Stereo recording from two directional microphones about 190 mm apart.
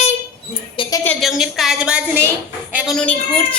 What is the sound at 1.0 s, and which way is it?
A woman's voice, centre (ahead or behind).